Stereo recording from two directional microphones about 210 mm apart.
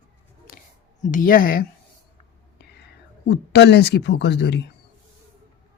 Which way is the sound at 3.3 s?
55° left (ahead or behind).